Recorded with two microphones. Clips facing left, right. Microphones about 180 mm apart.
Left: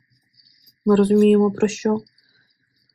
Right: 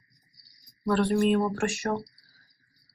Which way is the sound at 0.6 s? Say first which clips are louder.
Left 10 dB; 20° left (ahead or behind).